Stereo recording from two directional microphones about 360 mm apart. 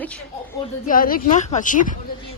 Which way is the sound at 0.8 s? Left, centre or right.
Left.